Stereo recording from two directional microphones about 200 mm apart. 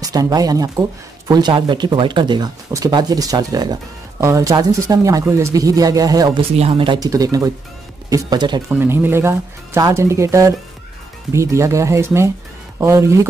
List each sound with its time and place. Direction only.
0.0 s speech: 20° right (ahead or behind)